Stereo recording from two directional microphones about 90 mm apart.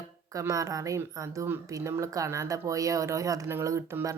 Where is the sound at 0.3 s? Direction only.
40° right (ahead or behind).